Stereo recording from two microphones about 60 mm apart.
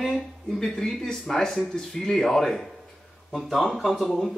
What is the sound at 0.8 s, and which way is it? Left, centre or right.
Speech, centre.